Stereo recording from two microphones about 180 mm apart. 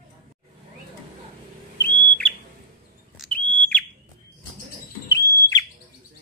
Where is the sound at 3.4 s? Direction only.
10° left (ahead or behind).